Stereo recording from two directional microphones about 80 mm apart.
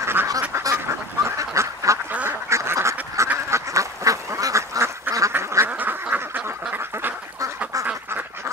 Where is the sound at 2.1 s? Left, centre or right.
Centre.